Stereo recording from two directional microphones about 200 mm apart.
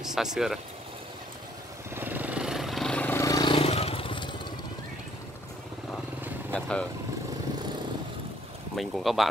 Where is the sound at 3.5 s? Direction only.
30° left (ahead or behind).